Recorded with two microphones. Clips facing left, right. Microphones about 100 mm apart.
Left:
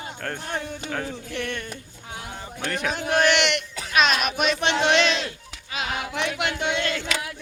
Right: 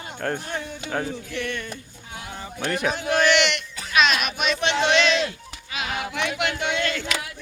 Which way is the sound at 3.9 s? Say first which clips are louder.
Even; 40° left (ahead or behind).